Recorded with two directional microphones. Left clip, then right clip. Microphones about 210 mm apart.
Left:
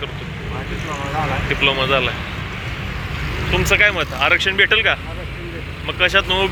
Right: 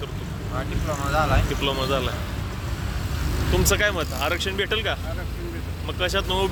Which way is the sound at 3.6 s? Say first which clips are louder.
Left 8 dB; 25° right (ahead or behind).